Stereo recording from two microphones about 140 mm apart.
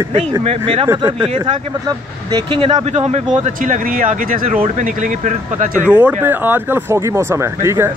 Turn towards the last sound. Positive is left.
turn(degrees=-20)  # may be behind; listen again after turning